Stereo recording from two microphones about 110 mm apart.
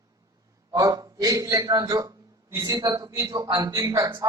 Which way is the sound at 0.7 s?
30° right (ahead or behind).